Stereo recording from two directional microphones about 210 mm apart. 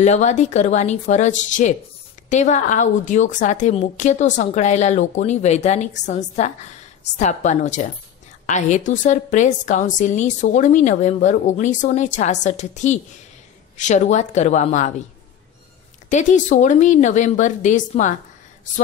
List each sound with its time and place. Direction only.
0.0 s a woman's voice: 35° left (ahead or behind)
16.1 s a woman's voice: 35° left (ahead or behind)